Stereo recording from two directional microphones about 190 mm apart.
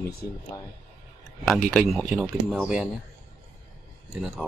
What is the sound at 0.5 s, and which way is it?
Speech, 15° left (ahead or behind).